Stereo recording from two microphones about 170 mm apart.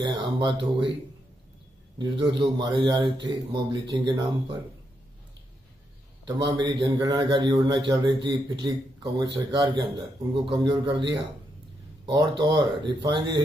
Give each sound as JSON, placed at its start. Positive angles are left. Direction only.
{"t": 0.0, "sound": "a man's voice", "side_deg": -25}
{"t": 2.0, "sound": "a man's voice", "side_deg": -25}
{"t": 6.2, "sound": "a man's voice", "side_deg": -25}